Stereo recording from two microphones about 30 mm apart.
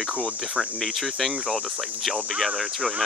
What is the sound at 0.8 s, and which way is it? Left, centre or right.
Speech, centre.